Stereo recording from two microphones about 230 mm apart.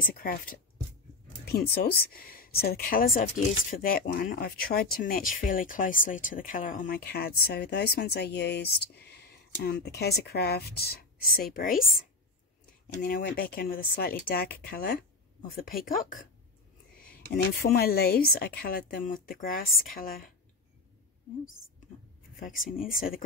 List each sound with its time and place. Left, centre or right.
0.0 s speech: left
13.0 s speech: left
22.8 s speech: left